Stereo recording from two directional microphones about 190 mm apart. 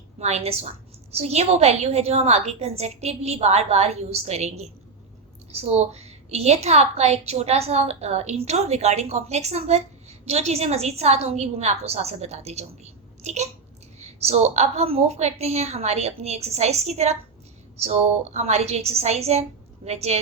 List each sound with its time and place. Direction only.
0.2 s a woman's voice: 35° right (ahead or behind)